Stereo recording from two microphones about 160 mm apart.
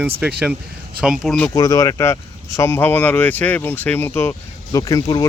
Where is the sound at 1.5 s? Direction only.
25° left (ahead or behind).